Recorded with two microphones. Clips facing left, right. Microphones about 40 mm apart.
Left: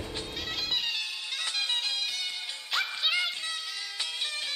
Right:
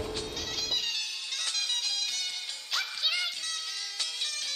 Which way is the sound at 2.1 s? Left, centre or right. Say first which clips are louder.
Left 1 dB; centre.